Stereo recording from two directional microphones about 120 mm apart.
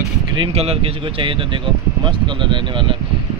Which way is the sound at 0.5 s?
55° right (ahead or behind).